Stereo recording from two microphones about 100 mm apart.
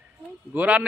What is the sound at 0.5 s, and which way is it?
Speech, 15° right (ahead or behind).